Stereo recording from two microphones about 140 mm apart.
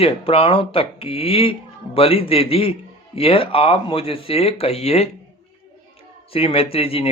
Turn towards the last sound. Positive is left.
turn(degrees=45)  # may be behind; listen again after turning